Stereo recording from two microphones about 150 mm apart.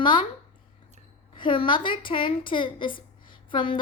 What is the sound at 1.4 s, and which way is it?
A woman's voice, 35° left (ahead or behind).